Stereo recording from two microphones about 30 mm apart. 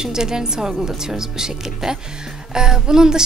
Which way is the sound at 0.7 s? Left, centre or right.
Centre.